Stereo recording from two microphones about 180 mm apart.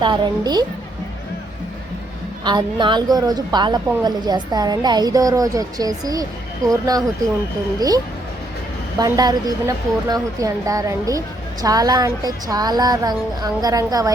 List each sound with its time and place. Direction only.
0.0 s a woman's voice: 25° right (ahead or behind)
2.4 s a woman's voice: 25° right (ahead or behind)